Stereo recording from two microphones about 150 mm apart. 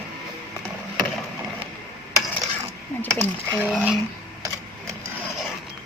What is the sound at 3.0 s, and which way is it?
Speech, 15° right (ahead or behind).